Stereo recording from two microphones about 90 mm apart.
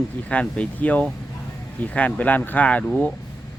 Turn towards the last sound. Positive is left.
turn(degrees=15)  # may be behind; listen again after turning